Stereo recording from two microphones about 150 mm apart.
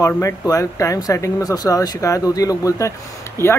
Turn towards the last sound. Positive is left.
turn(degrees=20)  # may be behind; listen again after turning